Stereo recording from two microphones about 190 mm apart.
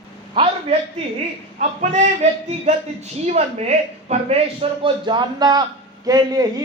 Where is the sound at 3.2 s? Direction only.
35° right (ahead or behind).